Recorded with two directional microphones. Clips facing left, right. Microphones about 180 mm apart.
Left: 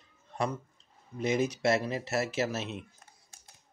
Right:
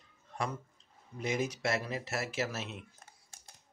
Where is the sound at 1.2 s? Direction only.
20° left (ahead or behind).